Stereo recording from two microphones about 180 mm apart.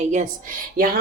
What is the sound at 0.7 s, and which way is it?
Speech, 55° right (ahead or behind).